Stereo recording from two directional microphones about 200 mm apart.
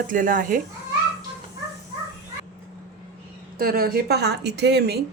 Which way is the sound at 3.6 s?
50° right (ahead or behind).